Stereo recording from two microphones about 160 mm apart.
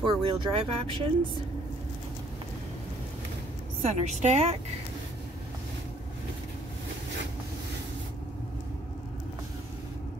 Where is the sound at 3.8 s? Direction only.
45° right (ahead or behind).